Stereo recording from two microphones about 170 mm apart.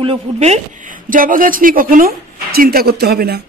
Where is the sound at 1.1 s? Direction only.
55° right (ahead or behind).